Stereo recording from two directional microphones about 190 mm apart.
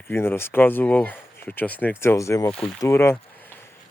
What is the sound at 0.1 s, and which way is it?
Speech, 10° left (ahead or behind).